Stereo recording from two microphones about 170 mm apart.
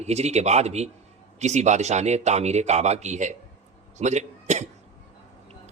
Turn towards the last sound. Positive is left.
turn(degrees=-45)  # may be behind; listen again after turning